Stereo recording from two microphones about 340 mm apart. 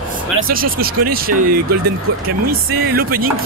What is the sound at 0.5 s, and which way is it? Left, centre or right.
A man's voice, right.